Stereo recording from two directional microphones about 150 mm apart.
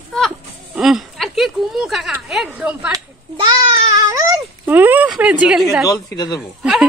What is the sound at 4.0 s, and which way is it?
Baby cry, 25° right (ahead or behind).